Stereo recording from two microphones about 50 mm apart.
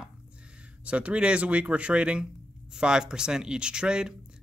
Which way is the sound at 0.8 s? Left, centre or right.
Right.